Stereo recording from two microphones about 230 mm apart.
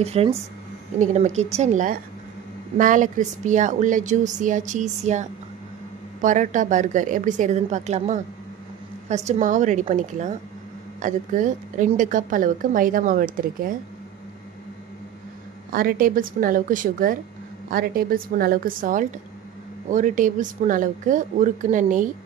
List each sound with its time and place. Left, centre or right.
0.0 s a woman's voice: right
15.7 s a woman's voice: right